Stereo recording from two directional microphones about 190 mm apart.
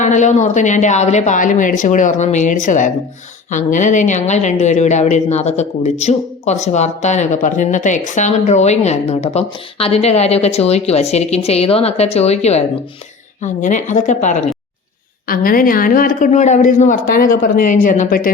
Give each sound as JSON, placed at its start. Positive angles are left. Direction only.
{"t": 0.0, "sound": "a woman's voice", "side_deg": 40}
{"t": 15.3, "sound": "speech", "side_deg": 50}